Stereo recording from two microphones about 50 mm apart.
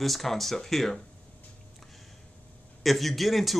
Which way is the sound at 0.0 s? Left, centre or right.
Centre.